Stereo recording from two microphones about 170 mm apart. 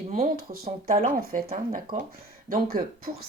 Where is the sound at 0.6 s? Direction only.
60° right (ahead or behind).